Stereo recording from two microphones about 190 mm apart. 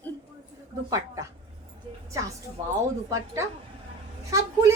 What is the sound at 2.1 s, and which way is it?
Speech, 15° right (ahead or behind).